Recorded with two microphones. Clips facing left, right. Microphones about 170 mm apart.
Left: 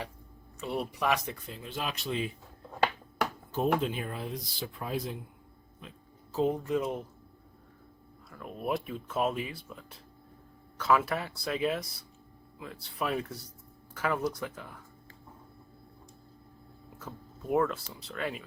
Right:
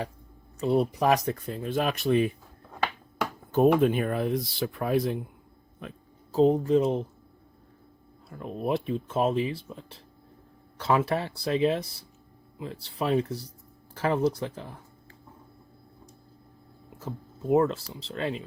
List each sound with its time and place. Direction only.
0.6 s speech: 40° right (ahead or behind); by 2.3 s 55° right (ahead or behind)
3.5 s speech: 55° right (ahead or behind)
6.3 s speech: 35° right (ahead or behind)
8.3 s speech: 30° right (ahead or behind)
17.0 s speech: 25° right (ahead or behind)